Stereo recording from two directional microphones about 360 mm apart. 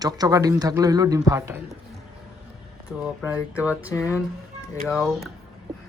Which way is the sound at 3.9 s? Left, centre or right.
Centre.